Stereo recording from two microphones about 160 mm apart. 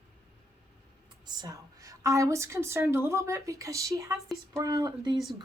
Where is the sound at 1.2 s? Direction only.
25° right (ahead or behind).